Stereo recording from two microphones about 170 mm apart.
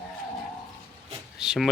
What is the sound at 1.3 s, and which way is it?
Speech, 5° right (ahead or behind).